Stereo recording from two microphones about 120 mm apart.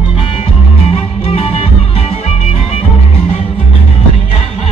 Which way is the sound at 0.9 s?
55° left (ahead or behind).